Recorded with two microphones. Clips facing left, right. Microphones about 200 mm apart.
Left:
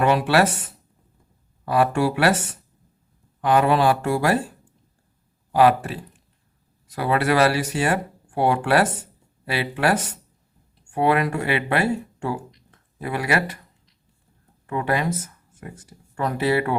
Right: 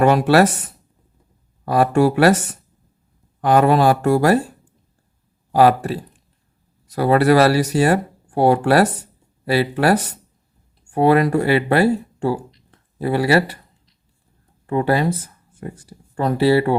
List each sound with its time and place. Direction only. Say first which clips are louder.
0.0 s speech: right 5 dB; 45° right (ahead or behind)
1.6 s speech: right 5 dB; 40° right (ahead or behind)